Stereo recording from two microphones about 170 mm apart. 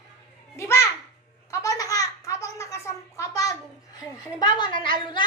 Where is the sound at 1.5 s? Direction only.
20° left (ahead or behind).